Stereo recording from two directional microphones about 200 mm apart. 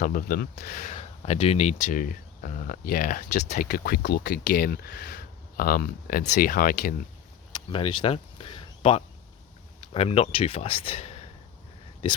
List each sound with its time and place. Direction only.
0.0 s speech: 45° left (ahead or behind)
7.5 s a sound: 25° left (ahead or behind)
8.0 s speech: 30° left (ahead or behind)